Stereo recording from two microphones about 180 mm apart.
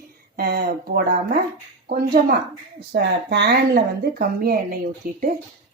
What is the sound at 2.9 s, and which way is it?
A woman's voice, 65° right (ahead or behind).